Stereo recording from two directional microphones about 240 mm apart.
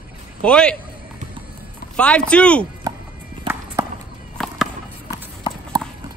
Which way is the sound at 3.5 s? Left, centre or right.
Centre.